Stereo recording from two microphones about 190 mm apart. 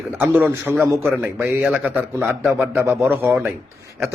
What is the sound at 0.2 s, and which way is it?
A man's voice, 10° right (ahead or behind).